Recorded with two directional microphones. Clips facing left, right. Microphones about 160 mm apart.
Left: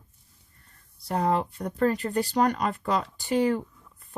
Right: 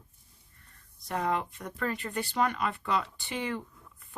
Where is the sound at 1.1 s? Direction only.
35° left (ahead or behind).